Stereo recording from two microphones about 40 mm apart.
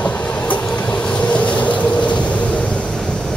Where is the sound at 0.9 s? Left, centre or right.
Left.